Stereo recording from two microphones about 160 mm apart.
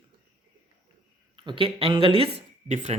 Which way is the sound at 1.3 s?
30° right (ahead or behind).